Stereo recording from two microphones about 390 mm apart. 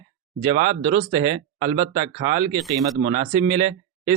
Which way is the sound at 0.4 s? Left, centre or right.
Centre.